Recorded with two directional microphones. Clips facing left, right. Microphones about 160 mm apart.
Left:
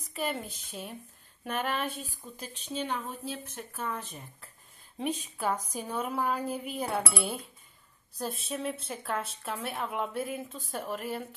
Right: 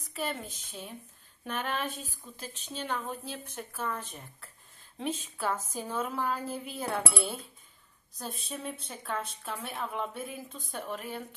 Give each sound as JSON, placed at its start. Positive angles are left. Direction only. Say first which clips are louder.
{"t": 0.2, "sound": "speech", "louder": "left 2 dB", "side_deg": 10}
{"t": 2.0, "sound": "speech", "louder": "left 2 dB", "side_deg": -35}
{"t": 2.9, "sound": "a woman's voice", "louder": "even", "side_deg": 0}
{"t": 5.0, "sound": "a woman's voice", "louder": "left 2 dB", "side_deg": 10}